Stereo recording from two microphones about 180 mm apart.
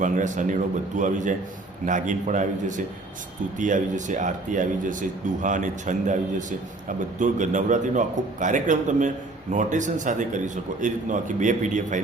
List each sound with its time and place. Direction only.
0.0 s a man's voice: 45° right (ahead or behind)